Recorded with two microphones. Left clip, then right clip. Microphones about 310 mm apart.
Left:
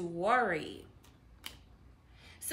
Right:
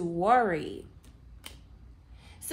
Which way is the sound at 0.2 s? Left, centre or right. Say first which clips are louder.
Right 5 dB; centre.